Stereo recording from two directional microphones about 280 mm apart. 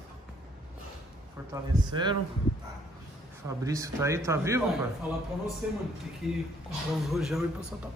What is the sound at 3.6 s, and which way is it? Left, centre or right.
Speech, centre.